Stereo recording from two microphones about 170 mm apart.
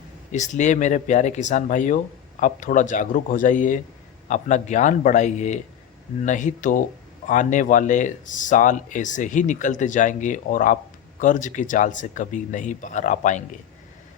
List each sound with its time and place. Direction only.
0.3 s speech: 45° left (ahead or behind)